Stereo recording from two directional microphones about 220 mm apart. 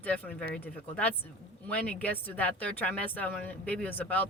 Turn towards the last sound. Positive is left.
turn(degrees=5)  # may be behind; listen again after turning